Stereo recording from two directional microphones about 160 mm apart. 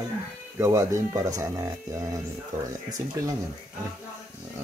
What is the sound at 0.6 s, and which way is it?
Speech, 20° right (ahead or behind).